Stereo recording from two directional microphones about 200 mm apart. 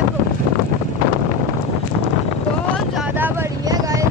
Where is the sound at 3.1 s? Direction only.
10° right (ahead or behind).